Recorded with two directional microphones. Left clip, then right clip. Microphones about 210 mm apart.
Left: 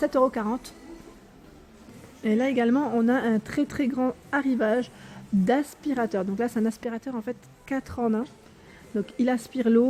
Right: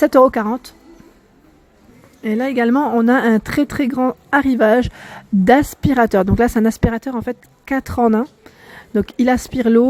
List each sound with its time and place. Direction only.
0.0 s speech: 30° right (ahead or behind)
2.2 s speech: 20° right (ahead or behind)